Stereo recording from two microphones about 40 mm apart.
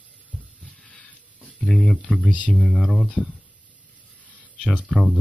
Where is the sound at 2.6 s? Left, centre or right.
Centre.